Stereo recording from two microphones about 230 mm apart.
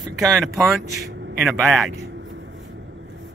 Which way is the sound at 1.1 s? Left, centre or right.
Right.